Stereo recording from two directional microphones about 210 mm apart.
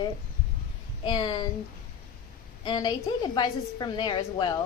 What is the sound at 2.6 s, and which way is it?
A woman's voice, 20° left (ahead or behind).